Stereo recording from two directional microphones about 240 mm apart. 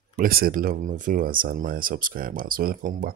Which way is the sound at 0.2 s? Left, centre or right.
Right.